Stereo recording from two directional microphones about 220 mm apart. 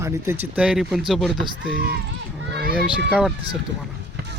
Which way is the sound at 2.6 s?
45° right (ahead or behind).